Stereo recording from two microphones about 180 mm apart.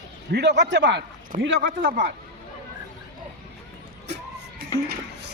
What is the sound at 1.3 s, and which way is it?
Speech, 50° right (ahead or behind).